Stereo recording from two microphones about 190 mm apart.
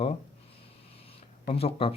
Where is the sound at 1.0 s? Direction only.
30° left (ahead or behind).